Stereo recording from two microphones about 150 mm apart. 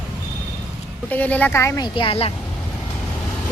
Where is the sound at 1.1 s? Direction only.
10° left (ahead or behind).